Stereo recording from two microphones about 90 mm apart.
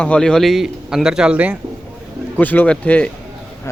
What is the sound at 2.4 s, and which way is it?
Speech, 20° left (ahead or behind).